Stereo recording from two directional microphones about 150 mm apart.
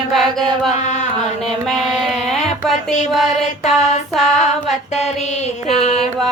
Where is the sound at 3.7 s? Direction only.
50° left (ahead or behind).